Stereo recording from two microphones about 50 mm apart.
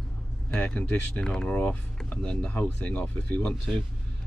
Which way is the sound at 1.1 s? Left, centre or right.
Centre.